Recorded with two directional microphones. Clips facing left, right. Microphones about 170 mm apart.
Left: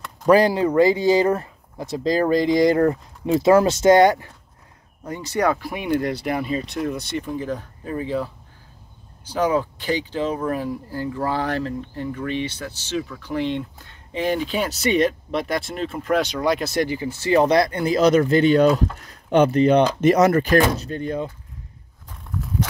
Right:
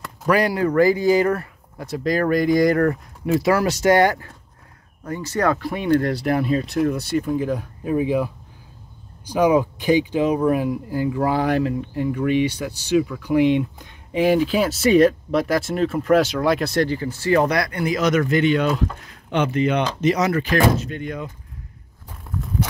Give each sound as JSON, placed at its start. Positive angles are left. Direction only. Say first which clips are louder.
{"t": 0.3, "sound": "speech", "louder": "left 3 dB", "side_deg": 25}
{"t": 6.1, "sound": "speech", "louder": "right 4 dB", "side_deg": 0}
{"t": 16.8, "sound": "speech", "louder": "right 2 dB", "side_deg": 15}
{"t": 20.0, "sound": "speech", "louder": "left 4 dB", "side_deg": 50}